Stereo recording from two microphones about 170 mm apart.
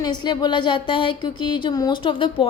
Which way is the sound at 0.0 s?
25° left (ahead or behind).